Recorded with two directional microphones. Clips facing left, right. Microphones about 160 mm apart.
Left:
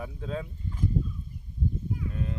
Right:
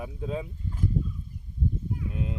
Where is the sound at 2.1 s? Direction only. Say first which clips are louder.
Right 3 dB; 15° right (ahead or behind).